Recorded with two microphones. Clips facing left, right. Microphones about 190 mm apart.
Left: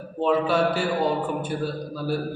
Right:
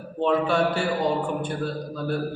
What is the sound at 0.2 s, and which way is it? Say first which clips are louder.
Speech: even; 5° left (ahead or behind).